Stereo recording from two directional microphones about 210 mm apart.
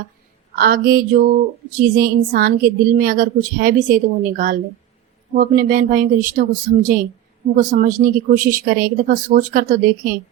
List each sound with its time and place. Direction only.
0.5 s a woman's voice: 45° right (ahead or behind)